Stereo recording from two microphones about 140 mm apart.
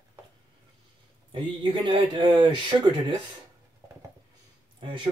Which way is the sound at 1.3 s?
35° right (ahead or behind).